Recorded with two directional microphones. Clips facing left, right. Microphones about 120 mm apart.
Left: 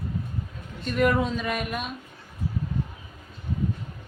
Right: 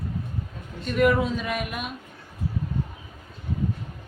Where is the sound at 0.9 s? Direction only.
Centre (ahead or behind).